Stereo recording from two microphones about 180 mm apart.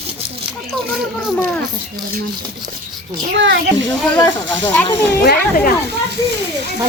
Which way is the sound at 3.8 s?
20° left (ahead or behind).